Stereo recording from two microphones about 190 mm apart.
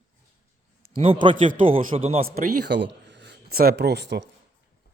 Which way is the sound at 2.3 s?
55° right (ahead or behind).